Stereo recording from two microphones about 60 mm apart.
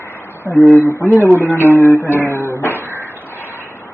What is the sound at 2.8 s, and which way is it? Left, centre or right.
Cupboard open or close, right.